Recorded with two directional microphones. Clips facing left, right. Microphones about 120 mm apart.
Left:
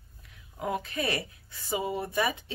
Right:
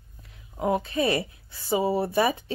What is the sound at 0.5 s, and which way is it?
Speech, 30° right (ahead or behind).